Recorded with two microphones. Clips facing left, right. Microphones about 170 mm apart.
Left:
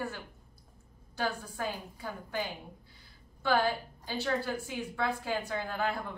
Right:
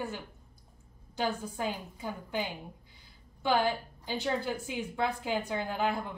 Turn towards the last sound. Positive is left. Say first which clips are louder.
# right 2 dB
turn(degrees=-15)  # may be behind; listen again after turning